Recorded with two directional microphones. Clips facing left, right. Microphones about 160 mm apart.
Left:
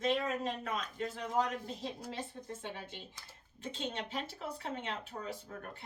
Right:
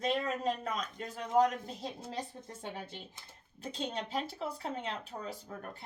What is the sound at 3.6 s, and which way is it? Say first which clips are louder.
A man's voice: right 2 dB; 35° right (ahead or behind).